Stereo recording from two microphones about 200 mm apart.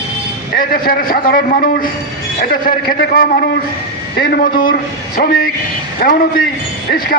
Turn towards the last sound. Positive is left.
turn(degrees=45)  # may be behind; listen again after turning